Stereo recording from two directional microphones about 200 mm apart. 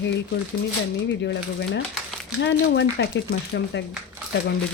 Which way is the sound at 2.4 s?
60° left (ahead or behind).